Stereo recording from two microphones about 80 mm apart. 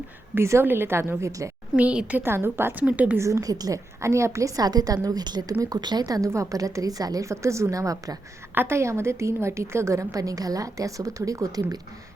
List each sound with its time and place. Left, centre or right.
0.3 s a woman's voice: right
1.7 s a woman's voice: centre
2.2 s a woman's voice: right
3.2 s a woman's voice: right
7.3 s a woman's voice: right
8.5 s a woman's voice: right